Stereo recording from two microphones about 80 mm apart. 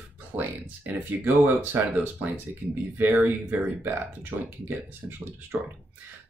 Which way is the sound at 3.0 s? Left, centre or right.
Right.